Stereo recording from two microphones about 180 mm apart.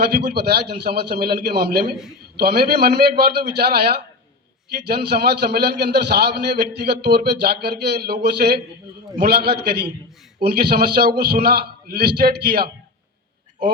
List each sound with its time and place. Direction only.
0.0 s a man's voice: 65° right (ahead or behind)